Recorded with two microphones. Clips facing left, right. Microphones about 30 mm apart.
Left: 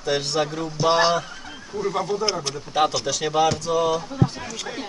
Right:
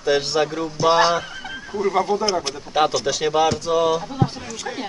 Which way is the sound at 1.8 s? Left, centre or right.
Centre.